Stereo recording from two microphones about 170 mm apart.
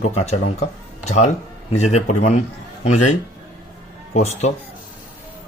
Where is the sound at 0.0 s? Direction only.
40° left (ahead or behind).